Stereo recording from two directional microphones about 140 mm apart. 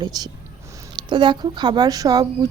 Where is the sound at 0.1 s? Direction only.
30° right (ahead or behind).